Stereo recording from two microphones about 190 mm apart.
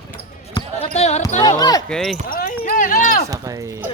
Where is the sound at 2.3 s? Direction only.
50° left (ahead or behind).